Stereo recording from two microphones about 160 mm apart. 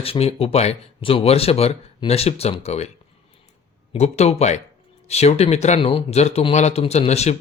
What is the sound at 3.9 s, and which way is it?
Speech, 40° left (ahead or behind).